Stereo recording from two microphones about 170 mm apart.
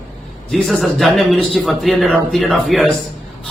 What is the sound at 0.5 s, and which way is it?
A man's voice, centre (ahead or behind).